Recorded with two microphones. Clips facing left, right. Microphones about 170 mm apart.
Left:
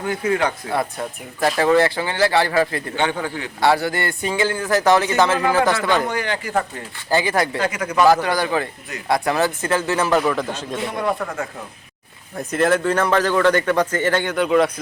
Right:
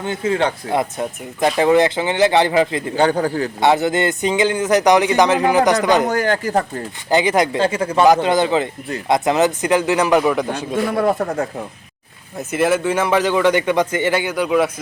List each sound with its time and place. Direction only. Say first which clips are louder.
0.0 s a man's voice: right 1 dB; 25° right (ahead or behind)
2.9 s a man's voice: right 6 dB; 40° right (ahead or behind)
3.6 s a man's voice: right 2 dB; 20° right (ahead or behind)
6.1 s speech: right 6 dB; 45° right (ahead or behind)
7.1 s a man's voice: right 4 dB; 20° right (ahead or behind)
11.0 s a man's voice: right 5 dB; 40° right (ahead or behind)
12.4 s a man's voice: right 1 dB; 5° right (ahead or behind)